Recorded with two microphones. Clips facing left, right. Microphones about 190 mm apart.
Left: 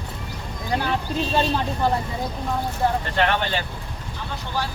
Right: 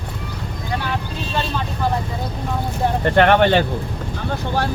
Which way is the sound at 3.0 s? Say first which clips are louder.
Right 9 dB; 60° right (ahead or behind).